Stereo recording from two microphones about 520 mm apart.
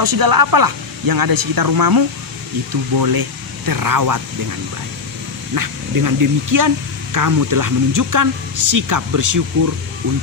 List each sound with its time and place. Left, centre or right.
0.0 s speech: right
5.5 s speech: right